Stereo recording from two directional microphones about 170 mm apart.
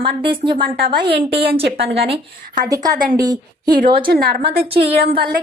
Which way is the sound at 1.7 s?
75° right (ahead or behind).